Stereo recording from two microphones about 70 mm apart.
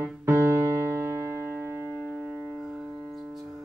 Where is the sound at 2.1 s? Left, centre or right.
Centre.